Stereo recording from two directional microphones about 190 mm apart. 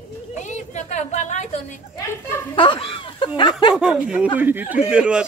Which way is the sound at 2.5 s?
25° left (ahead or behind).